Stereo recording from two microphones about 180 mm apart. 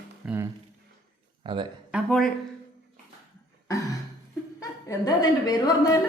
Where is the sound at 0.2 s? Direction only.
5° right (ahead or behind).